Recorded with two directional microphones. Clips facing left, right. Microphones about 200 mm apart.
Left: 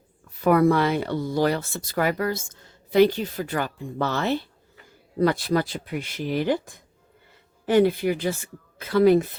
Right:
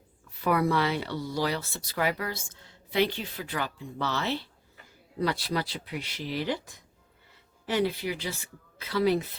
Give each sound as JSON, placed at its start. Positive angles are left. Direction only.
{"t": 0.4, "sound": "speech", "side_deg": 50}